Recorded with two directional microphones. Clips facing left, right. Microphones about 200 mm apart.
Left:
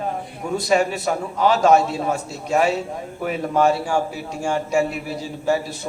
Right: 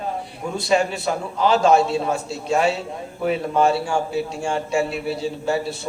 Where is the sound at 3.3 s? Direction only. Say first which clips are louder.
Even; 30° right (ahead or behind).